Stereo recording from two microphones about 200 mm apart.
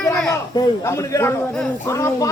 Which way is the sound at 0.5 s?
15° left (ahead or behind).